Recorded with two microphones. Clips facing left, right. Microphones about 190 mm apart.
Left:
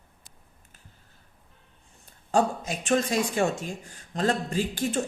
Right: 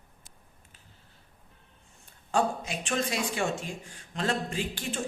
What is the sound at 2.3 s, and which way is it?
Speech, 40° left (ahead or behind).